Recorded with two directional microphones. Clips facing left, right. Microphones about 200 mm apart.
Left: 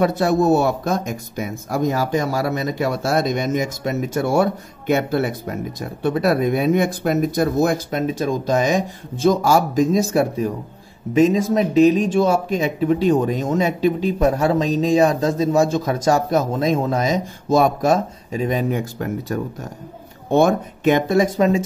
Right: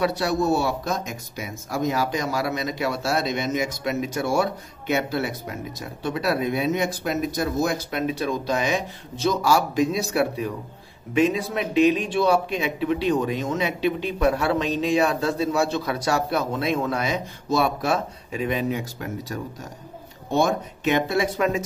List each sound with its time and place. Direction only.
0.0 s a man's voice: 50° left (ahead or behind)